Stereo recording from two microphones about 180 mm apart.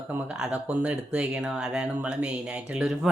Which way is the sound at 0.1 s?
5° right (ahead or behind).